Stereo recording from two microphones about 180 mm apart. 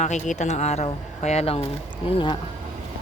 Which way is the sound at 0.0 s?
40° left (ahead or behind).